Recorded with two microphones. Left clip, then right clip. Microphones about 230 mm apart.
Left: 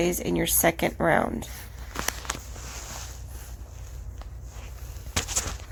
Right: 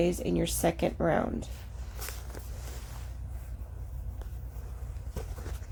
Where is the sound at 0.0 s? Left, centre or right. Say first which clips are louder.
Left 3 dB; centre.